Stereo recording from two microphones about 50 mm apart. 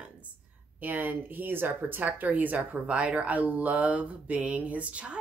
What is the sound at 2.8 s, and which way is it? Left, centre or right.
Speech, right.